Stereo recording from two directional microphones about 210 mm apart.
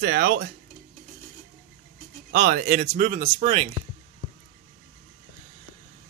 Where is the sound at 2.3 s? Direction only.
45° right (ahead or behind); by 3.8 s 25° right (ahead or behind).